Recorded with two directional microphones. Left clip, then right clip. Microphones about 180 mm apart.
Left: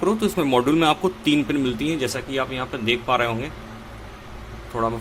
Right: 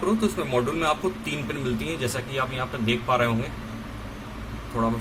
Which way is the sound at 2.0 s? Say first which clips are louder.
Left 3 dB; 30° left (ahead or behind).